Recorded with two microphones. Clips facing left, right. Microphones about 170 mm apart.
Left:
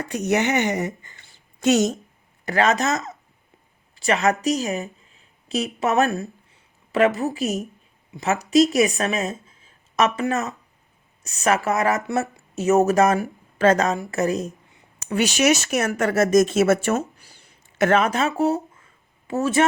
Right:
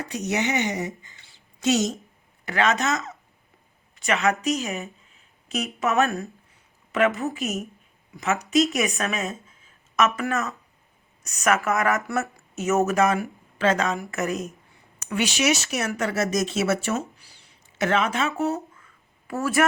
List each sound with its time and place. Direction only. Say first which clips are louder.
0.0 s speech: left 5 dB; 50° left (ahead or behind)
2.4 s speech: left 3 dB; 40° left (ahead or behind)